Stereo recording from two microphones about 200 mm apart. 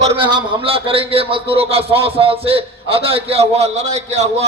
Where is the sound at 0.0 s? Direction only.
25° right (ahead or behind).